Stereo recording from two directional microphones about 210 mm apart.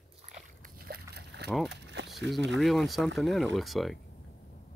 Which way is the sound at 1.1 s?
55° right (ahead or behind).